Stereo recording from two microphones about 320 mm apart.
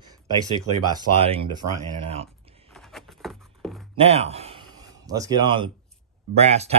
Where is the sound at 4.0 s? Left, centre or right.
Centre.